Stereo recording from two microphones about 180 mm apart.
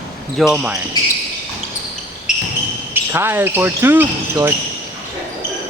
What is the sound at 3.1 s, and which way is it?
Speech, 10° right (ahead or behind).